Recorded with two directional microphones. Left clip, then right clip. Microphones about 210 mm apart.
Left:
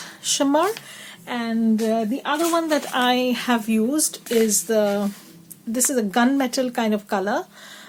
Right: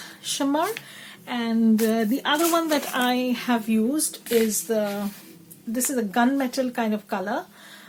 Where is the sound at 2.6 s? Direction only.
10° left (ahead or behind).